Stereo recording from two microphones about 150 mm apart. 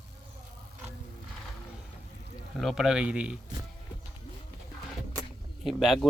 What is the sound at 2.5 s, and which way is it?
Speech, centre (ahead or behind).